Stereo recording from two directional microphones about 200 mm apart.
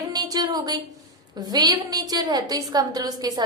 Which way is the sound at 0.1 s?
20° right (ahead or behind).